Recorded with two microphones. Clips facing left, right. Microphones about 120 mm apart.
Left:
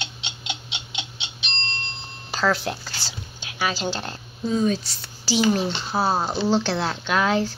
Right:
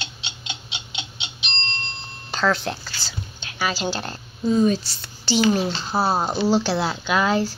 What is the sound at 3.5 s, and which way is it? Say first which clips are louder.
A woman's voice: right 1 dB; centre (ahead or behind).